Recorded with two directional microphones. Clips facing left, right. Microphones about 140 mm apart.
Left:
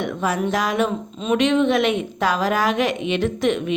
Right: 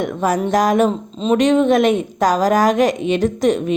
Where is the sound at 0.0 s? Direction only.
40° right (ahead or behind).